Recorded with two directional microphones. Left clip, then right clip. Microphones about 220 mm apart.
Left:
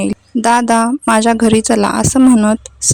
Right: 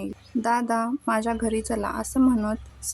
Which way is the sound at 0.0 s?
40° left (ahead or behind).